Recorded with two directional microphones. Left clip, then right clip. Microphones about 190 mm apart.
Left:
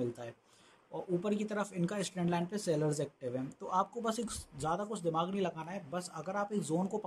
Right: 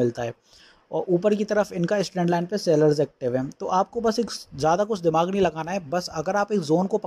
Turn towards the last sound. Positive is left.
turn(degrees=-30)  # may be behind; listen again after turning